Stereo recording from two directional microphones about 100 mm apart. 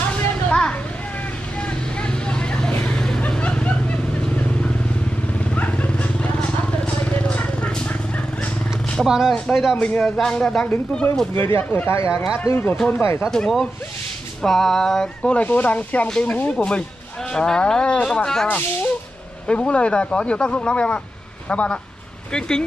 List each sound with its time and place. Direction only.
0.1 s a sound: 10° left (ahead or behind)
1.6 s vehicle: 10° left (ahead or behind)
8.9 s speech: 5° right (ahead or behind)
9.8 s speech: 10° left (ahead or behind)
11.3 s speech: 20° left (ahead or behind)